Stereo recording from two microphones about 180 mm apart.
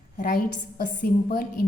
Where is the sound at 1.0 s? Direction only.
55° left (ahead or behind).